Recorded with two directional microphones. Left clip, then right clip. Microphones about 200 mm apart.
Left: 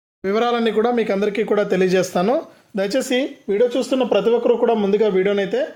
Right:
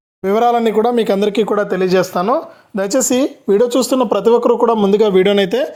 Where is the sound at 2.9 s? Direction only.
25° right (ahead or behind); by 5.6 s 40° right (ahead or behind).